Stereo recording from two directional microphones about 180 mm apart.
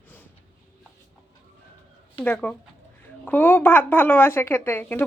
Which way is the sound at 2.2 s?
5° left (ahead or behind).